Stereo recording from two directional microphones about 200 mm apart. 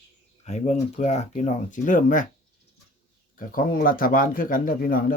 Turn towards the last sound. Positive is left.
turn(degrees=45)  # may be behind; listen again after turning